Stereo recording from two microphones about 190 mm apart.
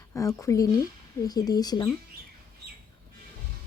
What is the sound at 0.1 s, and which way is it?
Speech, 15° left (ahead or behind).